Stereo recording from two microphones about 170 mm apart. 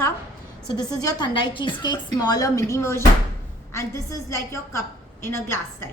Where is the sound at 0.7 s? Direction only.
25° left (ahead or behind).